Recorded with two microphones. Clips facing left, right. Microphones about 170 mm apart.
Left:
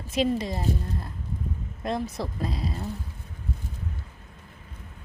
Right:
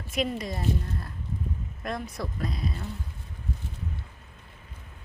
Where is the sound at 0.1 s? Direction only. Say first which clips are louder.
Left 4 dB; 25° left (ahead or behind).